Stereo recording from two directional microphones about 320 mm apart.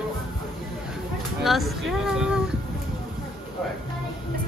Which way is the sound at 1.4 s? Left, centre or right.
Centre.